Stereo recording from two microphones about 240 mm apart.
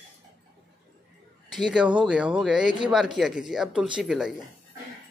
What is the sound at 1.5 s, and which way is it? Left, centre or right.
Speech, centre.